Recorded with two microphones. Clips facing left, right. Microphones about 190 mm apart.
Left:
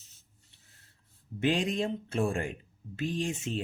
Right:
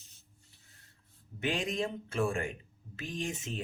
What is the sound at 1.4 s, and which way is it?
Speech, 30° left (ahead or behind).